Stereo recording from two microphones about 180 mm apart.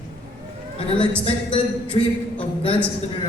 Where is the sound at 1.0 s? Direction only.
30° left (ahead or behind).